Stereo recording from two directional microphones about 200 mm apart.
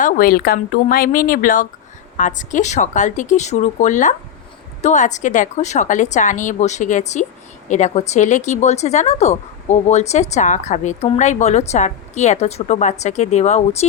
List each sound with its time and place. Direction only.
0.0 s a woman's voice: 45° left (ahead or behind)